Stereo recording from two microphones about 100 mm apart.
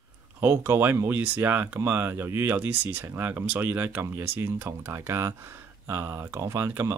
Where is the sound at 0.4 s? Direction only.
20° right (ahead or behind).